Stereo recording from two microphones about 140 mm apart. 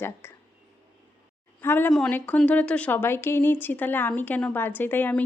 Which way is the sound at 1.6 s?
15° left (ahead or behind).